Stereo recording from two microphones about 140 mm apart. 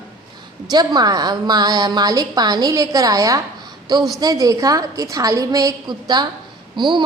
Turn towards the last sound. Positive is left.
turn(degrees=-35)  # may be behind; listen again after turning